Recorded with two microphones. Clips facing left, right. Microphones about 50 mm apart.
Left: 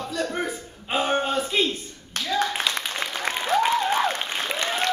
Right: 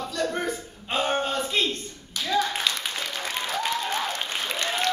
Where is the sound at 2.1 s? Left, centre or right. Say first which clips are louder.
Left 1 dB; left.